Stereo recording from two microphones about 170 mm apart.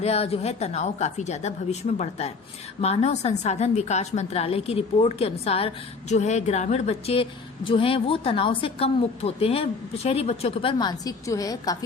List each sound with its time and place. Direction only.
0.0 s a woman's voice: 35° left (ahead or behind); by 11.8 s 20° left (ahead or behind)